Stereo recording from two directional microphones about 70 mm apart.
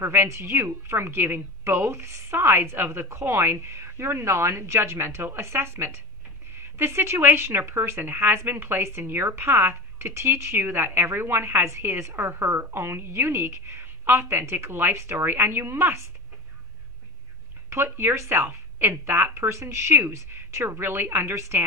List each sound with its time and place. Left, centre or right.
0.0 s speech: right
17.6 s speech: right